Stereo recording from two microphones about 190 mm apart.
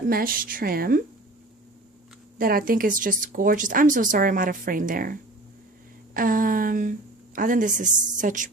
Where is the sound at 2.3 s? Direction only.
50° right (ahead or behind).